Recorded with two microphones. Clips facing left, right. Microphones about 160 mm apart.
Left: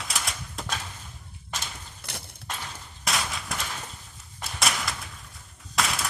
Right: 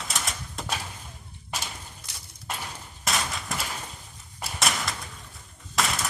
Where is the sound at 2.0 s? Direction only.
60° left (ahead or behind).